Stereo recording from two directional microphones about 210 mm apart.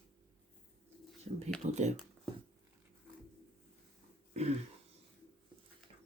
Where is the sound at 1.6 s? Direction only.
35° right (ahead or behind).